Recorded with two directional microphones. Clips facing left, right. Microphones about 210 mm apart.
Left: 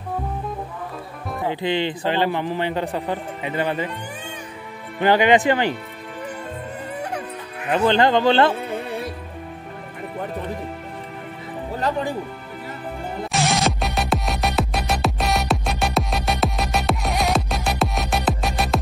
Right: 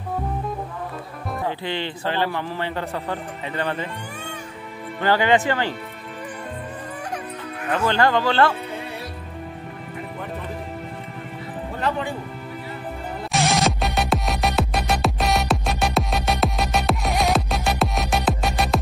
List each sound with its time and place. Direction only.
1.4 s a man's voice: 15° left (ahead or behind)
5.0 s a man's voice: 15° left (ahead or behind)
7.7 s speech: 20° left (ahead or behind)
11.8 s speech: 40° left (ahead or behind)
13.3 s music: centre (ahead or behind)